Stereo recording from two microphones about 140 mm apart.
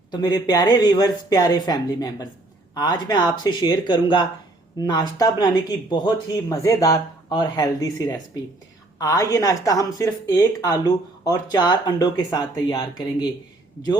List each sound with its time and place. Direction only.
0.1 s a woman's voice: 30° left (ahead or behind)